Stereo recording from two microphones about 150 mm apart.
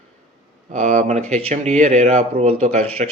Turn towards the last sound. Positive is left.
turn(degrees=-50)  # may be behind; listen again after turning